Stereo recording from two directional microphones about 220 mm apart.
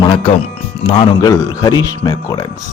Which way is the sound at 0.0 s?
25° left (ahead or behind).